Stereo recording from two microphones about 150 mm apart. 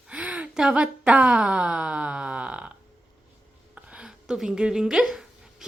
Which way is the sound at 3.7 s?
5° right (ahead or behind).